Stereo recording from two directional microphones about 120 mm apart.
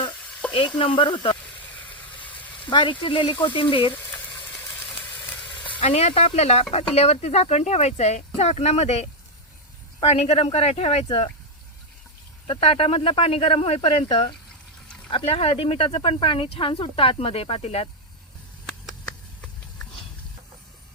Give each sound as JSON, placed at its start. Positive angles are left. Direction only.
{"t": 0.4, "sound": "sizzle", "side_deg": 10}
{"t": 0.8, "sound": "speech", "side_deg": 45}
{"t": 2.6, "sound": "speech", "side_deg": 40}
{"t": 5.4, "sound": "sizzle", "side_deg": 10}
{"t": 5.8, "sound": "speech", "side_deg": 65}
{"t": 12.5, "sound": "speech", "side_deg": 55}
{"t": 15.1, "sound": "speech", "side_deg": 55}